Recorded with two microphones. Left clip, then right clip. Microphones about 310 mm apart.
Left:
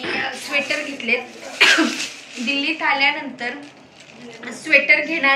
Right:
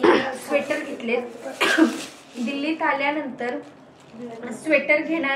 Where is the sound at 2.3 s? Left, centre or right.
Centre.